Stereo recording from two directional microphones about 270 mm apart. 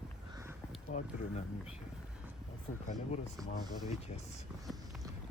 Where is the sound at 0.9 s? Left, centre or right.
Left.